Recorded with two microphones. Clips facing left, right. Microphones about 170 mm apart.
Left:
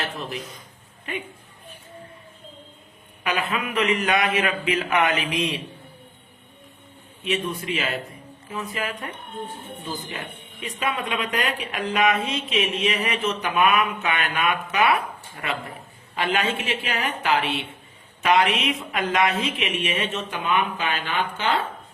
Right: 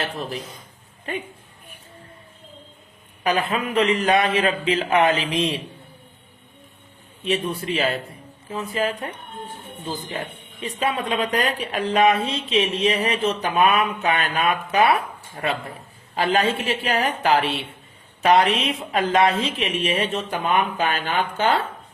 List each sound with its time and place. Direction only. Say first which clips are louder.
0.0 s speech: right 2 dB; 35° right (ahead or behind)
3.2 s speech: right 4 dB; 35° right (ahead or behind)
7.3 s speech: right 2 dB; 35° right (ahead or behind)